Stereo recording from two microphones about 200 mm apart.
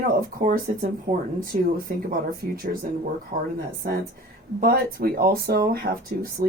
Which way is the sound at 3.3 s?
35° right (ahead or behind).